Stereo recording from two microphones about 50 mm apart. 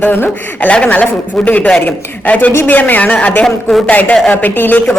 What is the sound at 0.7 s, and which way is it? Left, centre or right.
A woman's voice, left.